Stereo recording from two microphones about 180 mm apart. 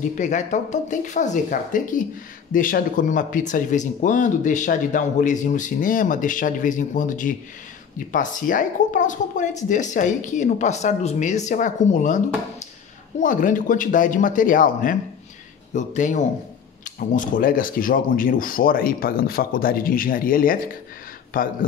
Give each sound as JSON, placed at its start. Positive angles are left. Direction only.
{"t": 0.2, "sound": "speech", "side_deg": 45}
{"t": 13.2, "sound": "speech", "side_deg": 45}